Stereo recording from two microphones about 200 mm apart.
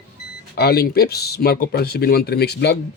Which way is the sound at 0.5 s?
50° left (ahead or behind).